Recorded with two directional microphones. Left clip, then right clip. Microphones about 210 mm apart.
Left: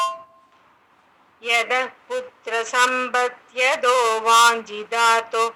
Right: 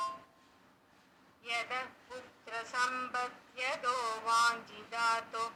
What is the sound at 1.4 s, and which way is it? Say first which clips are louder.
Speech: left 17 dB; 50° left (ahead or behind).